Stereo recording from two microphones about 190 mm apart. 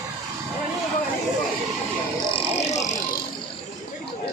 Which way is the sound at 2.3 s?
20° left (ahead or behind).